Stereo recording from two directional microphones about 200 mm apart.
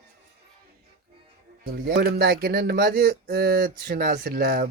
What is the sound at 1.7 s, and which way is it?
Speech, 50° right (ahead or behind).